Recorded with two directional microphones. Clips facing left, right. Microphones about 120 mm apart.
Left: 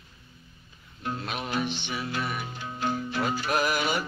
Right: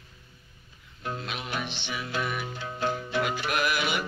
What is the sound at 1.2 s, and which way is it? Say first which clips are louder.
Music: left 6 dB; 45° left (ahead or behind).